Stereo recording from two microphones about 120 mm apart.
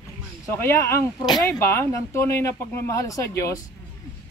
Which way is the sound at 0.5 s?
20° left (ahead or behind).